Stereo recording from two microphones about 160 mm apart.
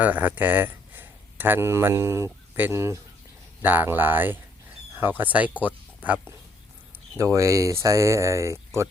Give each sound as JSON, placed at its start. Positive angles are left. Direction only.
{"t": 0.0, "sound": "speech", "side_deg": -10}